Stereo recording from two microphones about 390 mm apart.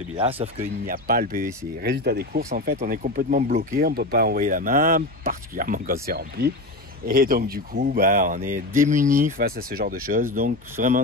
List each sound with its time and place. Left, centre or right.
0.2 s speech: centre